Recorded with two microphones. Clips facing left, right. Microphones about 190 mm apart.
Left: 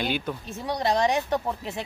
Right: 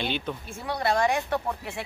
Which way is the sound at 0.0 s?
5° left (ahead or behind).